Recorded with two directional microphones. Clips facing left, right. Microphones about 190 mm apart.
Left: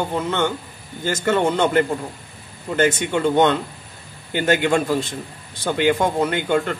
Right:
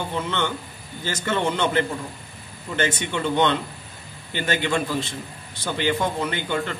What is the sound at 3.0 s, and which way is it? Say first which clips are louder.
Speech: left 3 dB; 45° left (ahead or behind).